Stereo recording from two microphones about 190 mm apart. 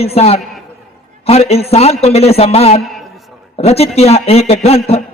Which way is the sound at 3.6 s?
30° left (ahead or behind).